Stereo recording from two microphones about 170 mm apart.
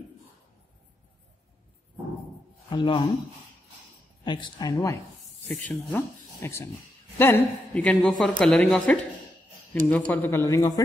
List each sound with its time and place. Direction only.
2.7 s speech: 25° left (ahead or behind)
4.2 s a woman's voice: 25° left (ahead or behind)